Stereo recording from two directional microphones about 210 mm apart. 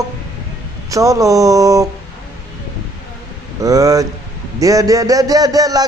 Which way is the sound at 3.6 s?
15° right (ahead or behind).